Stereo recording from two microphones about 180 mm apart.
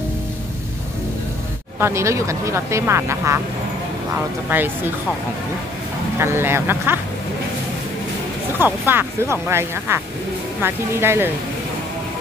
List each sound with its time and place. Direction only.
1.8 s speech: 15° right (ahead or behind)
6.1 s speech: 15° right (ahead or behind)
8.5 s speech: 10° right (ahead or behind)